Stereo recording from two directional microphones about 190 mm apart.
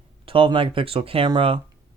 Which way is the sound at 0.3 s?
25° right (ahead or behind).